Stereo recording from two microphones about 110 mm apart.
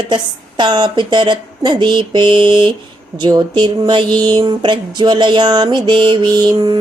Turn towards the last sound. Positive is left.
turn(degrees=-45)  # may be behind; listen again after turning